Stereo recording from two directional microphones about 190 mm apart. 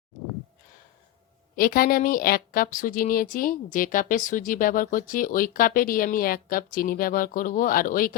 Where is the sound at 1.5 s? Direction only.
50° left (ahead or behind).